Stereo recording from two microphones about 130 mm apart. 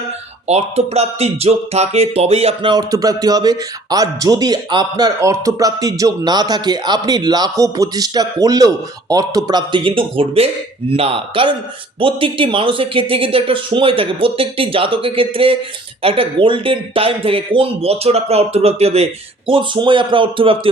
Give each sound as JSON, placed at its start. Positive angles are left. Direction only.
{"t": 0.4, "sound": "speech", "side_deg": -55}
{"t": 19.5, "sound": "speech", "side_deg": -40}